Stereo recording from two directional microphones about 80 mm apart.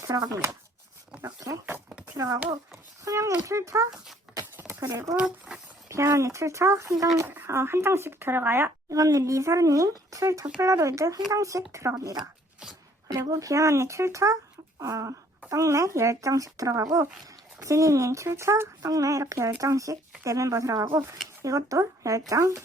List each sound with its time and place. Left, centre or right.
0.1 s speech: right
4.3 s a sound: centre
4.8 s speech: right
5.1 s speech: centre
5.9 s speech: right
8.9 s speech: right